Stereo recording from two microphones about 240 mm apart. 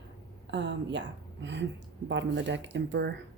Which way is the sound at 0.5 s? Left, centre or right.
Right.